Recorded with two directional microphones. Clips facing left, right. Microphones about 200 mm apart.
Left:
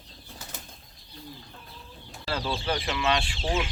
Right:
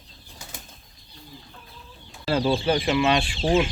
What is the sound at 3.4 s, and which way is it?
Speech, 30° right (ahead or behind).